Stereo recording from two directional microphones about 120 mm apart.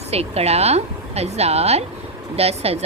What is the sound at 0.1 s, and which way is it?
A woman's voice, 60° right (ahead or behind).